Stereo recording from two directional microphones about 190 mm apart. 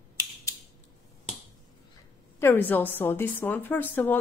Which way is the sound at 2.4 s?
10° left (ahead or behind).